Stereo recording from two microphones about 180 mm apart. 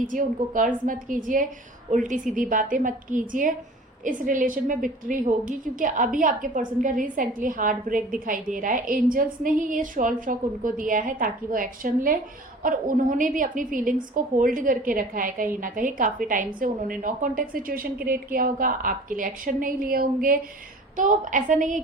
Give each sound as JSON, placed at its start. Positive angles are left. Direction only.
{"t": 0.0, "sound": "a woman's voice", "side_deg": -45}